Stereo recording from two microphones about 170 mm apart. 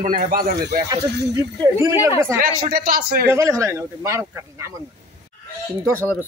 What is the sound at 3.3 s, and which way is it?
Speech, 15° right (ahead or behind).